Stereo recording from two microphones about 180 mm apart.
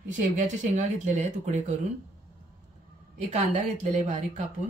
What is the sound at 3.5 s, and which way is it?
Speech, 40° right (ahead or behind).